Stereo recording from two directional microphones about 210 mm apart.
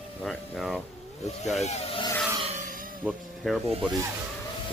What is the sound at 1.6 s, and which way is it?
Speech, 30° left (ahead or behind).